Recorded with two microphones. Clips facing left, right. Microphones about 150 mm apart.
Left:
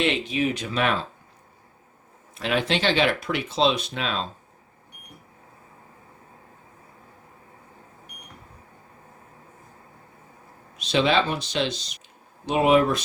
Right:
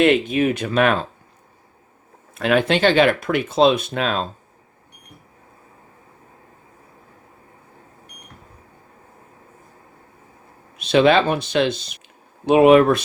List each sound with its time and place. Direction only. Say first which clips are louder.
0.0 s speech: right 8 dB; 55° right (ahead or behind)
2.3 s speech: right 7 dB; 55° right (ahead or behind)
10.8 s speech: right 7 dB; 55° right (ahead or behind)